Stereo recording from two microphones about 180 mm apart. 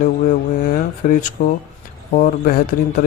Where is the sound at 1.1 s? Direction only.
45° left (ahead or behind).